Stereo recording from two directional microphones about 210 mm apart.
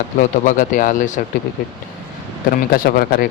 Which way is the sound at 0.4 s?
40° left (ahead or behind).